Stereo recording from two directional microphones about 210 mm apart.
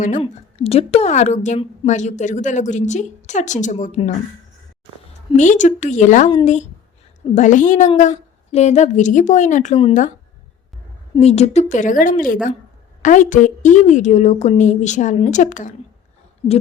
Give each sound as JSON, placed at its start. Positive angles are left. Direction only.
{"t": 0.0, "sound": "a woman's voice", "side_deg": 30}
{"t": 5.4, "sound": "a woman's voice", "side_deg": 35}
{"t": 11.2, "sound": "a woman's voice", "side_deg": 30}